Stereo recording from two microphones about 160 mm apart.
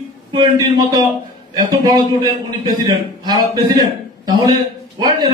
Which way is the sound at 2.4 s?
25° right (ahead or behind).